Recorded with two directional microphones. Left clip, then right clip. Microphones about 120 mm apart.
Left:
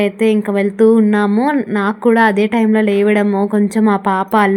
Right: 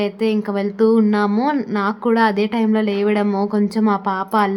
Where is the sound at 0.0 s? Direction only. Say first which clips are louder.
Left 5 dB; 25° left (ahead or behind).